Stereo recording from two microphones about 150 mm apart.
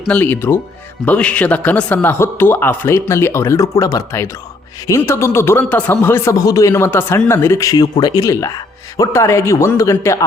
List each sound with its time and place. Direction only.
0.1 s a man's voice: 10° left (ahead or behind)